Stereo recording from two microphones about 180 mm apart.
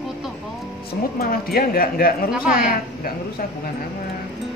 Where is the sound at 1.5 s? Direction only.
55° left (ahead or behind).